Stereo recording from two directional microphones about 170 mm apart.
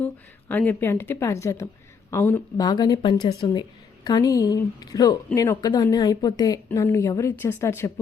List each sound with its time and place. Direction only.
0.0 s a woman's voice: 10° left (ahead or behind)
2.6 s a woman's voice: 25° left (ahead or behind)